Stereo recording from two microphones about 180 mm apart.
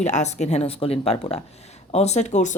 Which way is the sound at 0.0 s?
40° left (ahead or behind).